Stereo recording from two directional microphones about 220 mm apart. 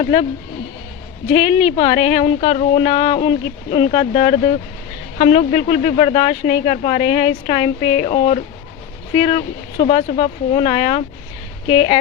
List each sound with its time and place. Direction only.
0.0 s speech: 30° left (ahead or behind)
1.3 s speech: 25° left (ahead or behind)